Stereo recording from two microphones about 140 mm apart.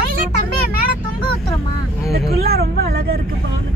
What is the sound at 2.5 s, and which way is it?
Speech, 90° right.